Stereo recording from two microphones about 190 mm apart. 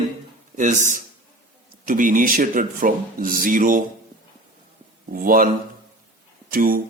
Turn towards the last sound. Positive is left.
turn(degrees=-50)  # may be behind; listen again after turning